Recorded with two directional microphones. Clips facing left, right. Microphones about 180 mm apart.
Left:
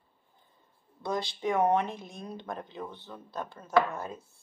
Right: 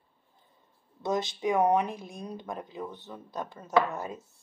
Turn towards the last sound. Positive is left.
turn(degrees=-20)  # may be behind; listen again after turning